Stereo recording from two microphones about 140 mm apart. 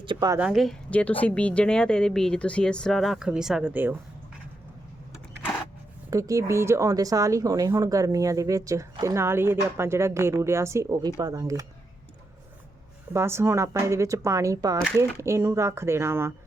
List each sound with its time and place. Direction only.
0.0 s speech: 35° right (ahead or behind)
0.3 s speech: 5° right (ahead or behind)
6.1 s speech: 25° right (ahead or behind)
13.1 s speech: 20° right (ahead or behind)